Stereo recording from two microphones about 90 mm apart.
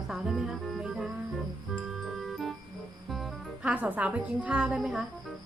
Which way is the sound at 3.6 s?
15° right (ahead or behind).